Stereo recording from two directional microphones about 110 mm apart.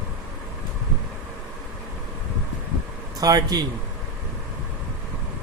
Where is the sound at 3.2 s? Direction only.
35° right (ahead or behind).